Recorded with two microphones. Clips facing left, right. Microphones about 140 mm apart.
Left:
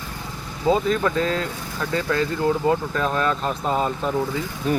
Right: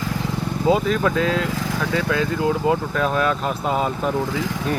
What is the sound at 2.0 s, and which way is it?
Speech, 10° right (ahead or behind).